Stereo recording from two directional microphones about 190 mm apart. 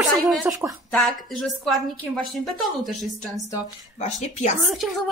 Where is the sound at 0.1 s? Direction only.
Centre (ahead or behind).